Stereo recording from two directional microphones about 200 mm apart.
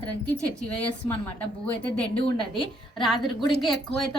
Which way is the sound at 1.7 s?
5° left (ahead or behind).